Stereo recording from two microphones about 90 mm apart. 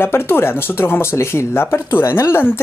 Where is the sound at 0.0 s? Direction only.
25° left (ahead or behind).